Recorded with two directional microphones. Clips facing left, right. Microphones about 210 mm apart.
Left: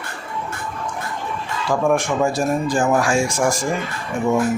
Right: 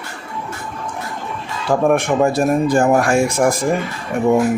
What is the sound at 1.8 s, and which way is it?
Speech, 60° right (ahead or behind).